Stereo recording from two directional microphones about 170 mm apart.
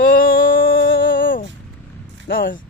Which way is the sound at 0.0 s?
55° left (ahead or behind).